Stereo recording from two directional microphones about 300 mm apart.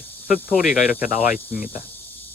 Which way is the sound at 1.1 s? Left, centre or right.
Left.